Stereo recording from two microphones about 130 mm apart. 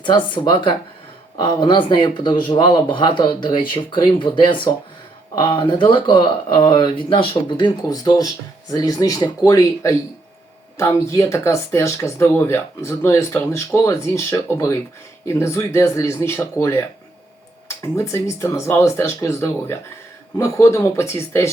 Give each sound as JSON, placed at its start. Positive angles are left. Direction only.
{"t": 0.0, "sound": "speech", "side_deg": 35}